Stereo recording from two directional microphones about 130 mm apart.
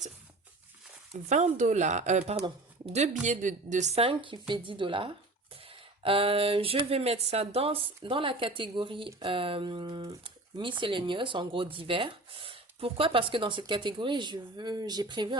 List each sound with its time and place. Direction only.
1.3 s speech: 65° right (ahead or behind)
3.2 s a woman's voice: 70° right (ahead or behind); by 15.4 s 35° right (ahead or behind)